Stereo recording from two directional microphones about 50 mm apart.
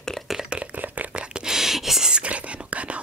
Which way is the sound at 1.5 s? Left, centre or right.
Centre.